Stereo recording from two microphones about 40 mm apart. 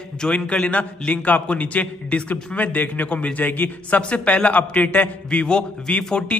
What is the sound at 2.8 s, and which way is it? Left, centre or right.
A man's voice, left.